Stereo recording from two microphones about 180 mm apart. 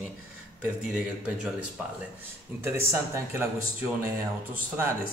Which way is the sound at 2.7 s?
15° right (ahead or behind).